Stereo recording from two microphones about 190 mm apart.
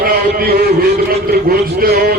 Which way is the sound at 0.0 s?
50° right (ahead or behind).